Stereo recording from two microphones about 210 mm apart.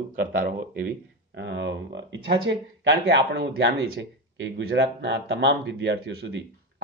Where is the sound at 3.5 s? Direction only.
60° right (ahead or behind).